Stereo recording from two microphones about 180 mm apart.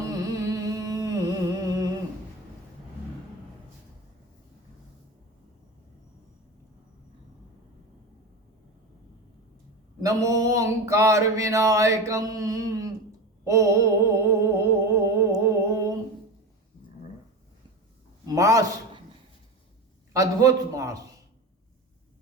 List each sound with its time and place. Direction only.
0.1 s humming: 20° right (ahead or behind)
10.0 s a sound: 20° right (ahead or behind)
18.3 s a man's voice: 20° right (ahead or behind)
20.1 s a man's voice: 20° right (ahead or behind)